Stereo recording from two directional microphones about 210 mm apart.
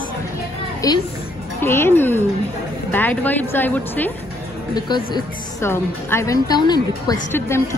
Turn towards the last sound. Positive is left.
turn(degrees=10)  # may be behind; listen again after turning